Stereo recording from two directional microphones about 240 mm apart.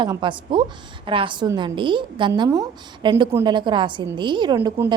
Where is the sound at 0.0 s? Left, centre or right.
Centre.